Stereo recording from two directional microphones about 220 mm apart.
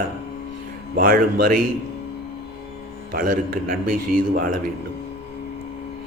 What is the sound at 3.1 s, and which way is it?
A man's voice, 40° right (ahead or behind).